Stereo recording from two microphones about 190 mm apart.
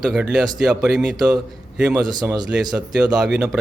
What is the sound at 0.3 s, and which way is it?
Speech, 5° right (ahead or behind).